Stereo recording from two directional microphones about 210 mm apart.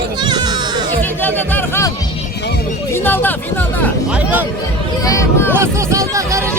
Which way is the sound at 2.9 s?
10° left (ahead or behind).